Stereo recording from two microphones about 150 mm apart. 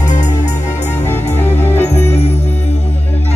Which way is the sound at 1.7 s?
15° left (ahead or behind).